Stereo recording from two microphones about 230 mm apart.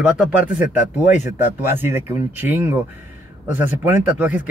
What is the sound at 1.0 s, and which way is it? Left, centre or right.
Speech, left.